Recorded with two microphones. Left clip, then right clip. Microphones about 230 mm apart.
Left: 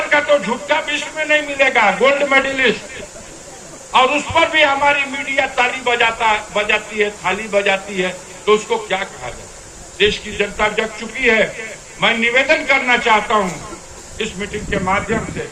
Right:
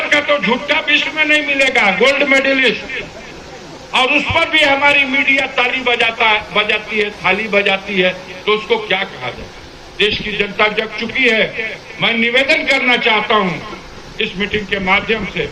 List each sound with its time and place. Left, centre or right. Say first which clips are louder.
0.1 s a man's voice: even; left